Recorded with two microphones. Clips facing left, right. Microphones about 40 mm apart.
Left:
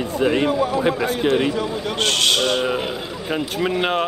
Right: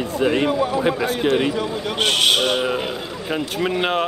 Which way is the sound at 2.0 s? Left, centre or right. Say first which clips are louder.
Right 1 dB; centre.